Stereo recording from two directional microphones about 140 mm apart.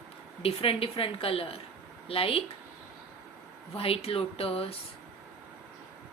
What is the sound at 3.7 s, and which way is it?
Speech, 40° left (ahead or behind).